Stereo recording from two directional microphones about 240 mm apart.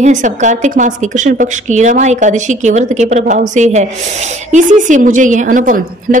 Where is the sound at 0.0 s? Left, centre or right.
Right.